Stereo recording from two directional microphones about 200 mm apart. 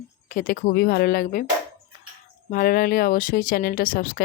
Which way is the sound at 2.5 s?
45° left (ahead or behind).